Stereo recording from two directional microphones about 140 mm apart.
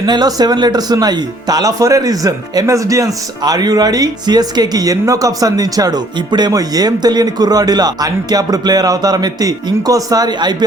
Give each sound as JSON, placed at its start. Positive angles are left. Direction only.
{"t": 0.0, "sound": "speech", "side_deg": -30}